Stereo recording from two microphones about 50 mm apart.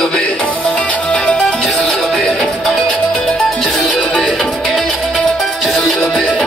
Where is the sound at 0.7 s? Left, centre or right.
Left.